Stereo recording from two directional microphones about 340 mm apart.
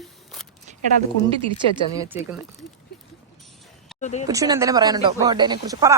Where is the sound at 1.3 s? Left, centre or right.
Centre.